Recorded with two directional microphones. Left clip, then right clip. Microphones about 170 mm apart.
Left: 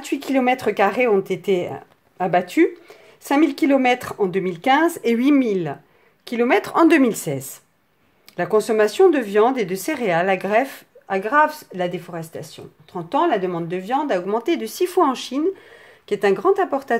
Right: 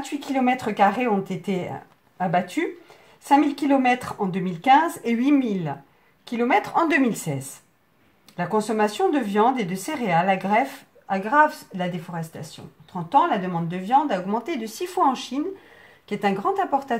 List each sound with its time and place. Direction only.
0.0 s speech: 50° left (ahead or behind)